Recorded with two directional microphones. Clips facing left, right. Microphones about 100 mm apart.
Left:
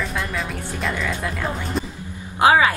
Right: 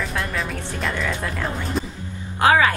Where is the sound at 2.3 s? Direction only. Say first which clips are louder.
Left 1 dB; 20° left (ahead or behind).